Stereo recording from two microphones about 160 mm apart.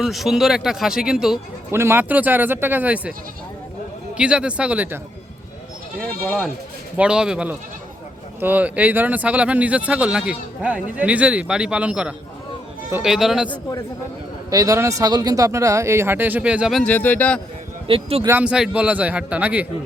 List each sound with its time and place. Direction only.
0.0 s speech: centre (ahead or behind)
1.7 s speech: 15° right (ahead or behind)
4.2 s speech: 5° right (ahead or behind)
6.0 s speech: 5° left (ahead or behind)
6.9 s speech: 5° right (ahead or behind)
14.5 s speech: 20° right (ahead or behind); by 16.8 s 5° right (ahead or behind)
16.8 s speech: 10° left (ahead or behind)
17.8 s a man's voice: 35° right (ahead or behind)
18.3 s speech: 10° right (ahead or behind)